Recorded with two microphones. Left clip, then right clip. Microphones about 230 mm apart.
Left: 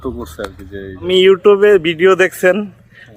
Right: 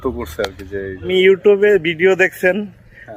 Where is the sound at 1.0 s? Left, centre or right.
Centre.